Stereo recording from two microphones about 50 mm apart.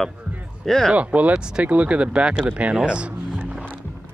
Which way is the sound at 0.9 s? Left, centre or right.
Right.